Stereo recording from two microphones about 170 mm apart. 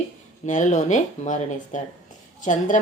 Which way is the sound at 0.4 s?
45° left (ahead or behind).